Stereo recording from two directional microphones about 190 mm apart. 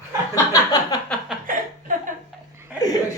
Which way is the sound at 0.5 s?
20° left (ahead or behind).